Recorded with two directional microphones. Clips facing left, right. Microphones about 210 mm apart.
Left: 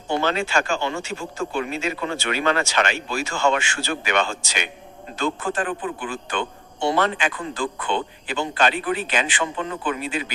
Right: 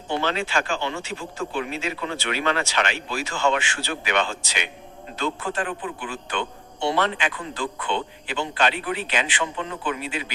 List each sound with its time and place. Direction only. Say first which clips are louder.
0.1 s a man's voice: left 3 dB; 45° left (ahead or behind)